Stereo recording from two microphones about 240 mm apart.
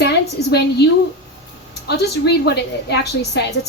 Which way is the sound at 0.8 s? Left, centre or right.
Left.